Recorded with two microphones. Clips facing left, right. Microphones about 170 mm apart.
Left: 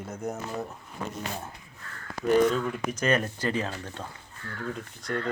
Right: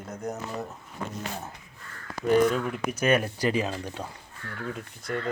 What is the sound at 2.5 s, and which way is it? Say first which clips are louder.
Speech: even; 10° right (ahead or behind).